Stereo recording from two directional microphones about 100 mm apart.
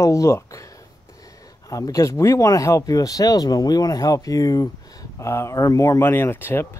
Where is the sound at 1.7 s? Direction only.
35° left (ahead or behind).